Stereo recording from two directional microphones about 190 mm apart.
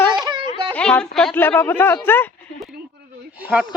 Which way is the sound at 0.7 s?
5° left (ahead or behind).